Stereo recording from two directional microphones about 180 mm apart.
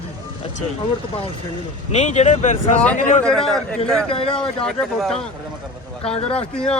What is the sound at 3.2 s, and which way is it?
Speech, centre (ahead or behind).